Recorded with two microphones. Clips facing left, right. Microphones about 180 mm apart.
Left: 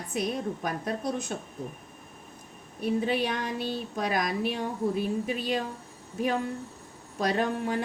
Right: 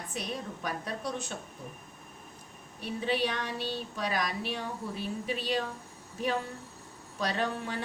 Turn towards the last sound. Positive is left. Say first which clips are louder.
# left 5 dB
turn(degrees=50)  # may be behind; listen again after turning